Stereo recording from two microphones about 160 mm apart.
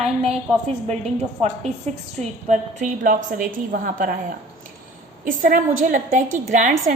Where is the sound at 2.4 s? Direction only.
55° right (ahead or behind).